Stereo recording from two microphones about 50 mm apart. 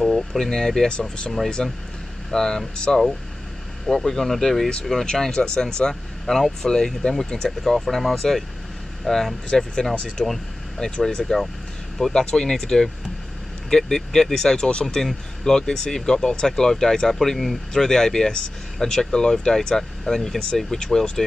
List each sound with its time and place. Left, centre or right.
0.0 s speech: centre
7.4 s speech: centre